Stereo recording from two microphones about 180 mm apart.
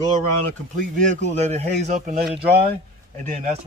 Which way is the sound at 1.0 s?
40° right (ahead or behind).